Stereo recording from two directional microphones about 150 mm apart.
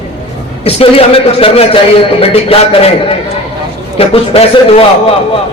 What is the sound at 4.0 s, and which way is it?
Speech, 40° left (ahead or behind).